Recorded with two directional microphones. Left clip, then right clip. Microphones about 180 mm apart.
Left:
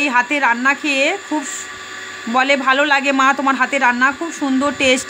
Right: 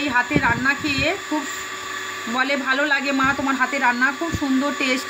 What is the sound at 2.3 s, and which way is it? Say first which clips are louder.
Speech: left 7 dB; 55° left (ahead or behind).